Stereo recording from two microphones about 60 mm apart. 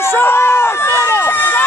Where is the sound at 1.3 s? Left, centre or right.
Left.